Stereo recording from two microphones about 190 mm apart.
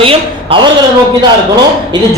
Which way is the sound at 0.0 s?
30° right (ahead or behind).